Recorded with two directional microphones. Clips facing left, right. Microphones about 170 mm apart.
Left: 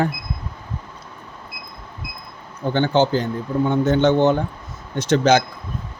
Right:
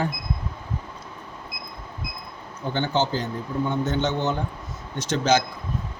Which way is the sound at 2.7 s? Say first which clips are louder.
Left 6 dB; 55° left (ahead or behind).